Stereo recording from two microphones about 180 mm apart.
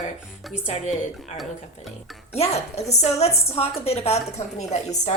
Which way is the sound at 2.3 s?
35° left (ahead or behind).